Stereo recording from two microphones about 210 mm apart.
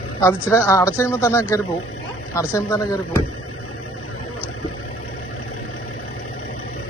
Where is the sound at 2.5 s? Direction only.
15° left (ahead or behind).